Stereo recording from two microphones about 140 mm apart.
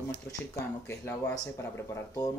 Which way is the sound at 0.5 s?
15° left (ahead or behind).